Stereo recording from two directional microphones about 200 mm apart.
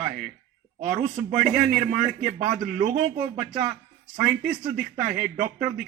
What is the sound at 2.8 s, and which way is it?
Speech, 40° right (ahead or behind).